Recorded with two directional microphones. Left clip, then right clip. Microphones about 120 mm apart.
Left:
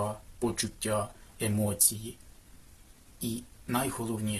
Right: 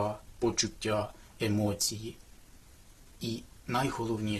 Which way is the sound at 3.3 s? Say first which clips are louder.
Even; 30° right (ahead or behind).